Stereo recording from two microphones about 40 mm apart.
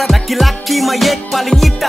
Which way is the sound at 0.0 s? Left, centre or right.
Centre.